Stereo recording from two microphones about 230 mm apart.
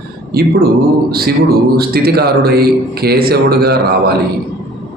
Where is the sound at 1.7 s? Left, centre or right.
Right.